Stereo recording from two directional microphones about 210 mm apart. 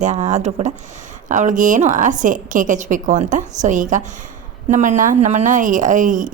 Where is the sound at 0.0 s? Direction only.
35° right (ahead or behind).